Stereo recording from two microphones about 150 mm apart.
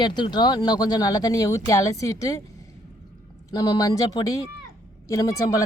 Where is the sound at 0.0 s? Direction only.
30° left (ahead or behind).